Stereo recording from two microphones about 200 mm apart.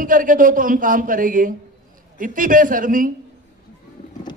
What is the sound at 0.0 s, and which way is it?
A man's voice, 45° right (ahead or behind).